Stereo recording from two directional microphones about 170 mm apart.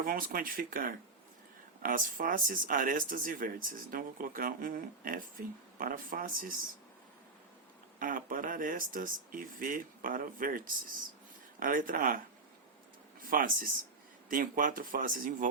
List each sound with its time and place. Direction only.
0.0 s speech: 55° right (ahead or behind)
7.9 s speech: 55° right (ahead or behind)
11.6 s speech: 50° right (ahead or behind)
13.2 s speech: 55° right (ahead or behind)